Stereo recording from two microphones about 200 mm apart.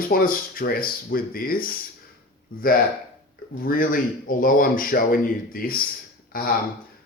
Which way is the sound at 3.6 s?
45° left (ahead or behind).